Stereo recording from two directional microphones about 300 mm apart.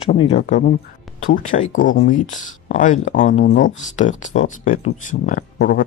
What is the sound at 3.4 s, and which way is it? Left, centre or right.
Speech, left.